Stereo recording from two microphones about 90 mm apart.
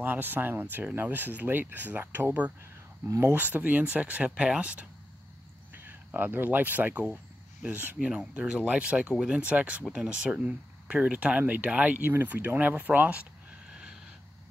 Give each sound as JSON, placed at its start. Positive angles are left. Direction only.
{"t": 0.0, "sound": "speech", "side_deg": -20}
{"t": 3.1, "sound": "speech", "side_deg": -30}